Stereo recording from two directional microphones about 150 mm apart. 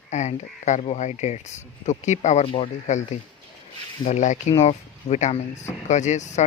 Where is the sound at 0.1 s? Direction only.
50° left (ahead or behind).